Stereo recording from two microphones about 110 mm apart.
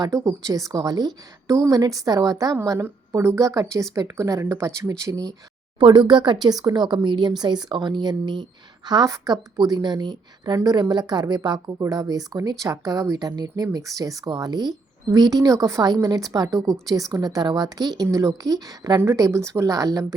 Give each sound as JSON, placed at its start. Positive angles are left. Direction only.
{"t": 0.0, "sound": "a woman's voice", "side_deg": -30}
{"t": 2.6, "sound": "speech", "side_deg": -25}
{"t": 5.8, "sound": "a woman's voice", "side_deg": -45}